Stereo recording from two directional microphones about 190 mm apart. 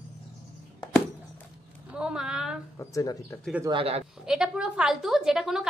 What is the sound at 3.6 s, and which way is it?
Speech, 25° right (ahead or behind).